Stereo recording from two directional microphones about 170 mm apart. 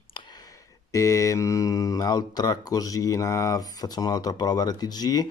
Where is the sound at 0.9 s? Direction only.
20° left (ahead or behind).